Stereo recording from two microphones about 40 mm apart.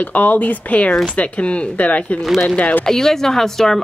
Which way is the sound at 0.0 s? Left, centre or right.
Left.